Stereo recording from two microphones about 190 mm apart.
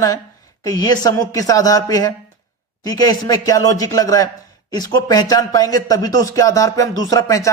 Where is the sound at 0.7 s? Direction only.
20° left (ahead or behind).